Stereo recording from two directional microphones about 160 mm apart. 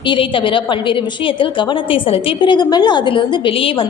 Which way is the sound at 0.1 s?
30° left (ahead or behind).